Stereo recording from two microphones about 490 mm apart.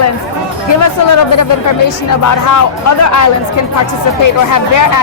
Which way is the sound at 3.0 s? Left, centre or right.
Left.